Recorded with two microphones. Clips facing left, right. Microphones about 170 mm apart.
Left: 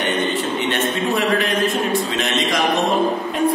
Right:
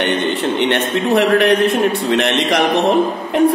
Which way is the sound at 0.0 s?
65° right (ahead or behind).